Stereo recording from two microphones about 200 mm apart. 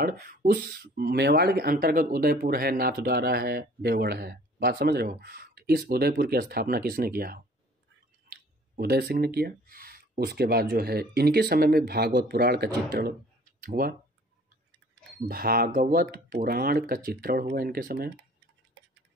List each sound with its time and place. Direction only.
0.0 s speech: 45° right (ahead or behind)
15.2 s speech: 50° right (ahead or behind)